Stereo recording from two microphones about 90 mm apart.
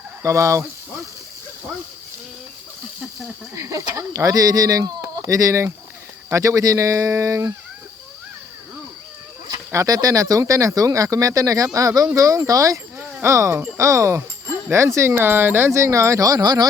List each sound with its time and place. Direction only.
0.2 s speech: 35° right (ahead or behind)
3.5 s speech: 35° right (ahead or behind)
9.7 s speech: 40° right (ahead or behind)